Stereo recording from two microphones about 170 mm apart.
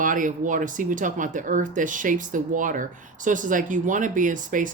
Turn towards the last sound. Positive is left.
turn(degrees=-50)  # may be behind; listen again after turning